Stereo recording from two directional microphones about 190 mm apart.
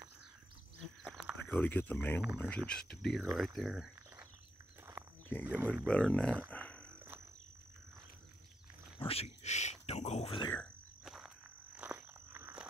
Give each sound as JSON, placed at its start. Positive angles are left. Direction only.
{"t": 1.0, "sound": "speech", "side_deg": 0}
{"t": 5.6, "sound": "speech", "side_deg": -10}
{"t": 5.9, "sound": "speech", "side_deg": 5}
{"t": 6.5, "sound": "a sound", "side_deg": 5}
{"t": 8.9, "sound": "speech", "side_deg": 30}
{"t": 10.5, "sound": "insect", "side_deg": 5}